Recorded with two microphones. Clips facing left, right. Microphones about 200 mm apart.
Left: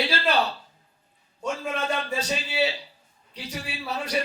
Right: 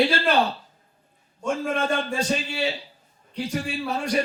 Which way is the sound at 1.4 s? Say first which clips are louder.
Right 4 dB; 50° right (ahead or behind).